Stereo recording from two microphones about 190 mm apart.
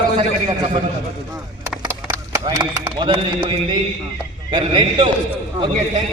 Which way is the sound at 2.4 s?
20° right (ahead or behind).